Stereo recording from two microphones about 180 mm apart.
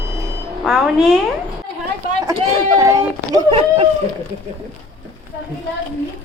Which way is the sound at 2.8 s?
20° right (ahead or behind).